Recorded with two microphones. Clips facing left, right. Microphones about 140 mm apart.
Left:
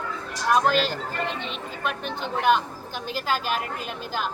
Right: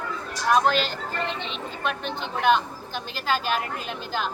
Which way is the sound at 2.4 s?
5° left (ahead or behind).